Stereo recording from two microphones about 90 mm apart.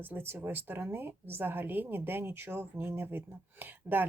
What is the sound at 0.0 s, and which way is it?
A woman's voice, 25° right (ahead or behind).